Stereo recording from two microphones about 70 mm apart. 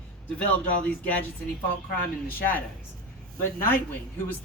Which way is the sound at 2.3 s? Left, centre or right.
Left.